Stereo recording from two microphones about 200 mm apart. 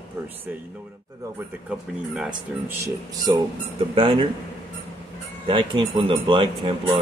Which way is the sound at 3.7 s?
25° right (ahead or behind).